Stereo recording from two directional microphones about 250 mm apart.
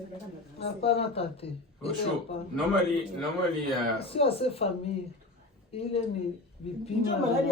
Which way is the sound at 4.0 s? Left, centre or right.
Left.